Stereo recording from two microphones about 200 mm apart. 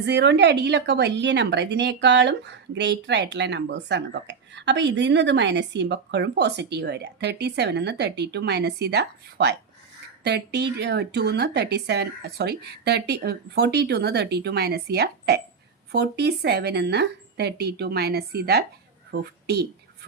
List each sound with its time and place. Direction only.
0.0 s a woman's voice: 60° right (ahead or behind)